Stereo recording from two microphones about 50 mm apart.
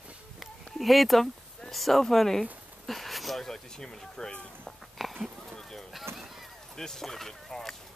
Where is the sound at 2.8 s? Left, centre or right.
Centre.